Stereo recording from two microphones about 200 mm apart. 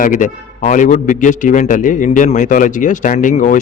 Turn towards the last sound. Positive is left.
turn(degrees=40)  # may be behind; listen again after turning